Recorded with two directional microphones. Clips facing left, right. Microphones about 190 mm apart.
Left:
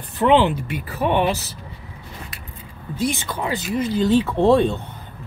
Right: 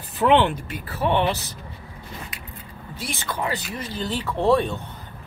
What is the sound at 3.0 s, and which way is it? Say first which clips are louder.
Speech: left 5 dB; 15° left (ahead or behind).